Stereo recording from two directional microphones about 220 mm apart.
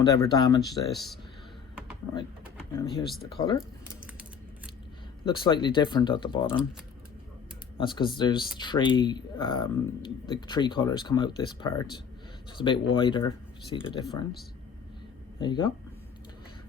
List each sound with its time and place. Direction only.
0.0 s speech: 15° left (ahead or behind)
0.9 s speech: centre (ahead or behind)
3.2 s speech: 20° left (ahead or behind)
5.2 s speech: 20° left (ahead or behind)
7.8 s speech: 20° left (ahead or behind)
15.4 s speech: 20° left (ahead or behind)